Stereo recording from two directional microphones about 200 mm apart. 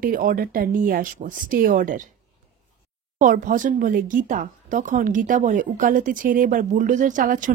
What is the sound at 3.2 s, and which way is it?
Speech, 40° right (ahead or behind).